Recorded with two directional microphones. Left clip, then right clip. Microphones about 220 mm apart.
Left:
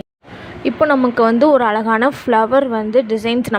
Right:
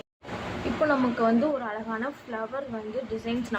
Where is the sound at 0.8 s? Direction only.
40° left (ahead or behind).